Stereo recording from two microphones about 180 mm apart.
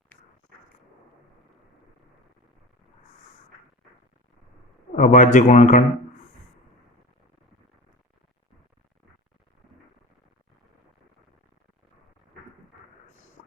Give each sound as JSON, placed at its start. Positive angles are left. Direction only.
{"t": 4.9, "sound": "a man's voice", "side_deg": 45}